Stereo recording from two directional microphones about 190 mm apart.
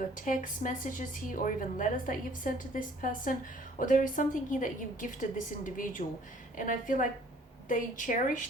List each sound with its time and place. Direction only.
0.2 s a woman's voice: 45° left (ahead or behind)